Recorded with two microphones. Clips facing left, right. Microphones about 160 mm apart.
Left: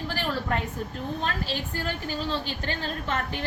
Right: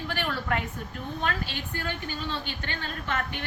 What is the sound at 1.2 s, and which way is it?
A woman's voice, 35° left (ahead or behind).